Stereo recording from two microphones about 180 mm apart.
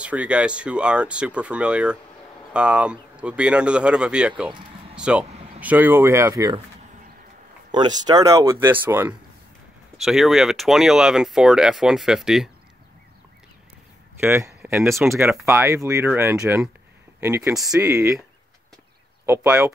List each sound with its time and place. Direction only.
0.0 s speech: 5° right (ahead or behind)
4.9 s a sound: 5° right (ahead or behind)
5.6 s speech: 10° right (ahead or behind)
7.7 s speech: 25° right (ahead or behind)
10.0 s speech: centre (ahead or behind)
14.2 s speech: 15° right (ahead or behind)
17.6 s speech: 5° right (ahead or behind)
19.2 s speech: 10° right (ahead or behind)